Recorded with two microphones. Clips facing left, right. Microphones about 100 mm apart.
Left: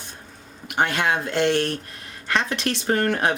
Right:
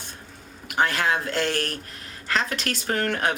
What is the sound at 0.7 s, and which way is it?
Speech, 25° left (ahead or behind).